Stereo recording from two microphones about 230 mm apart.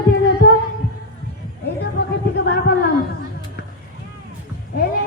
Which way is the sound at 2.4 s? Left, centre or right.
Left.